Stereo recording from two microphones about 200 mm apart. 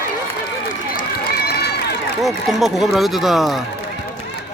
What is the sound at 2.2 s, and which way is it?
Speech, centre (ahead or behind).